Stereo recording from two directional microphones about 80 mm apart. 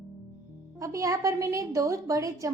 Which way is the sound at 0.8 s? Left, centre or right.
Right.